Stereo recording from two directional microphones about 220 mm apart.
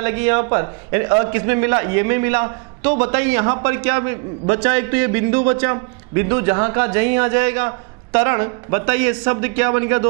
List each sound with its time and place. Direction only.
0.0 s a man's voice: 15° right (ahead or behind)